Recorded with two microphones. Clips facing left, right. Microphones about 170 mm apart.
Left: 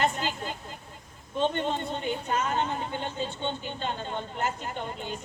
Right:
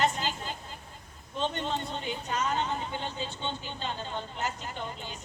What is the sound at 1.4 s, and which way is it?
A woman's voice, 50° left (ahead or behind).